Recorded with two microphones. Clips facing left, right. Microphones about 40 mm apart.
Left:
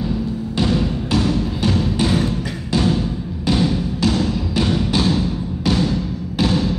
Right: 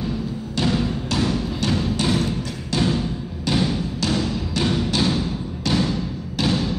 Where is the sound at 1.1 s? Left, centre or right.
Centre.